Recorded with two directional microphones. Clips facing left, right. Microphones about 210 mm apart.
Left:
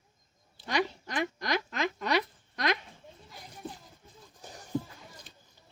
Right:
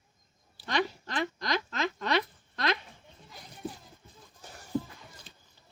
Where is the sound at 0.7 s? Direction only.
10° left (ahead or behind).